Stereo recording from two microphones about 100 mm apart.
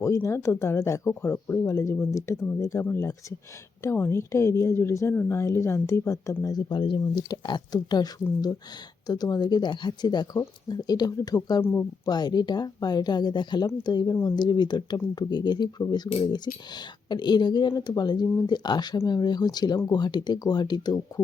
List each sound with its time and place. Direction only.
0.0 s speech: 30° left (ahead or behind)
6.7 s speech: 55° left (ahead or behind); by 11.3 s 40° left (ahead or behind)
11.6 s speech: 20° left (ahead or behind)
12.0 s speech: 45° left (ahead or behind)